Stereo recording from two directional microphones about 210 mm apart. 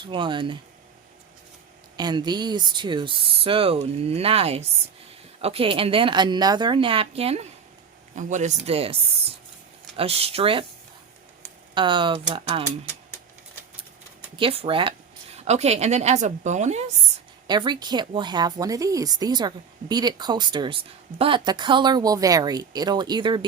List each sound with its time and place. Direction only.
0.1 s a woman's voice: 20° right (ahead or behind)
2.0 s a woman's voice: 20° right (ahead or behind)
11.7 s a woman's voice: 20° right (ahead or behind)
14.3 s a woman's voice: 25° right (ahead or behind)
17.4 s a woman's voice: 20° right (ahead or behind)